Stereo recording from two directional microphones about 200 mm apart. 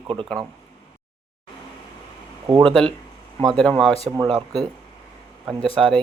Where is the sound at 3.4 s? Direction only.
5° left (ahead or behind).